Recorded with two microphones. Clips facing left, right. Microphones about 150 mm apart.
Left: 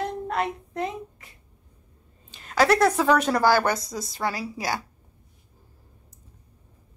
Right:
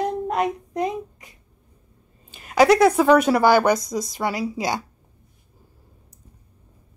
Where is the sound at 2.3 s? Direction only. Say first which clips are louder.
Right 5 dB; 10° right (ahead or behind).